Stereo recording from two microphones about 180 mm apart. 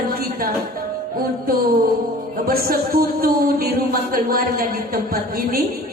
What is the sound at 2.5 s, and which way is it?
Speech, 55° right (ahead or behind).